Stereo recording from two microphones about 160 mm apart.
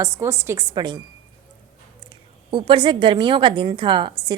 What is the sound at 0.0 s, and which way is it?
Speech, 15° right (ahead or behind).